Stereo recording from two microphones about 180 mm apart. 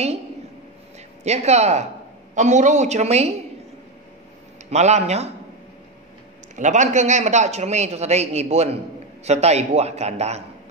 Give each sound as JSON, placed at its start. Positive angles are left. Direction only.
{"t": 1.2, "sound": "speech", "side_deg": -40}
{"t": 4.6, "sound": "speech", "side_deg": -40}
{"t": 6.5, "sound": "speech", "side_deg": -40}